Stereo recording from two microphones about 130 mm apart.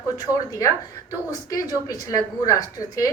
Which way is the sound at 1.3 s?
25° left (ahead or behind).